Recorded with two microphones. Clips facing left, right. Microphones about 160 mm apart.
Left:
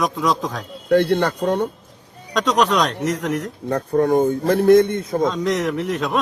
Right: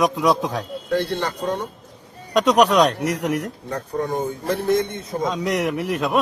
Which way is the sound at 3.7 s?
55° left (ahead or behind).